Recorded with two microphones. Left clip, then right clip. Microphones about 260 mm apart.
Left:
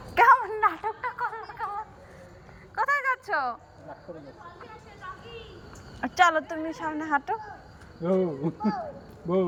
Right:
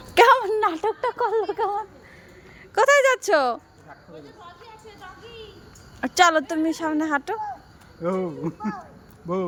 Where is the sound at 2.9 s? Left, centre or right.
Right.